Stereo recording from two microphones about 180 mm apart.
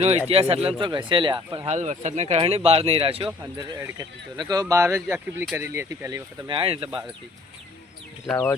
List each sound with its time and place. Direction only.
0.3 s speech: 35° right (ahead or behind)
1.5 s speech: 40° right (ahead or behind); by 6.2 s 15° right (ahead or behind)
6.5 s speech: 30° right (ahead or behind)